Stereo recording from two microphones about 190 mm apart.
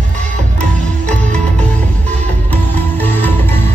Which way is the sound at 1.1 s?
5° left (ahead or behind).